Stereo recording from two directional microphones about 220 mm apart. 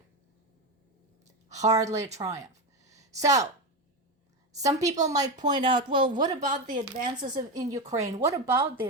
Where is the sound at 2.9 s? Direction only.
15° right (ahead or behind).